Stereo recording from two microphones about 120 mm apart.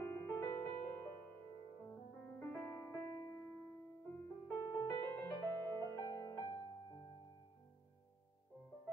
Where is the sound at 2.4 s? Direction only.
20° left (ahead or behind).